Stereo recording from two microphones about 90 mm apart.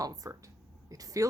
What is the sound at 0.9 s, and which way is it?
Vehicle, 40° right (ahead or behind).